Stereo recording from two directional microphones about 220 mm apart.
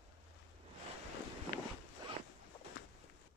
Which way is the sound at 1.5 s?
40° left (ahead or behind).